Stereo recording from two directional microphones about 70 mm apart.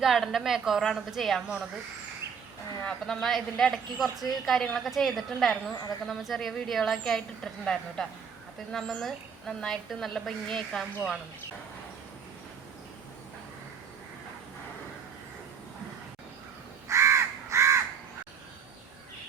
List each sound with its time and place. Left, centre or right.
0.0 s a woman's voice: centre
0.8 s a woman's voice: centre
2.8 s a woman's voice: centre
16.9 s crow: right